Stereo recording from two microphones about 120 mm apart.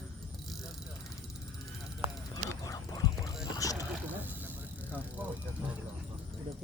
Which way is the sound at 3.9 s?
15° right (ahead or behind).